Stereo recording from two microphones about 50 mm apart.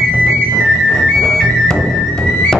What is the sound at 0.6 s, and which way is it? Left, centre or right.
Music, centre.